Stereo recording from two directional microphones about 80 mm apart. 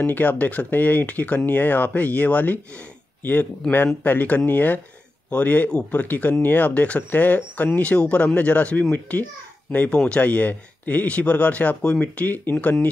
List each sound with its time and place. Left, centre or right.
0.0 s speech: left